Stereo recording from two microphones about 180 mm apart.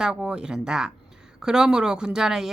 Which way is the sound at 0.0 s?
5° right (ahead or behind).